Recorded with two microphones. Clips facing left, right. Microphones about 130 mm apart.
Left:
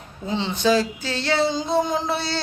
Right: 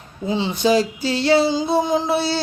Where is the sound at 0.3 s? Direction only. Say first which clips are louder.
Right 2 dB; 10° right (ahead or behind).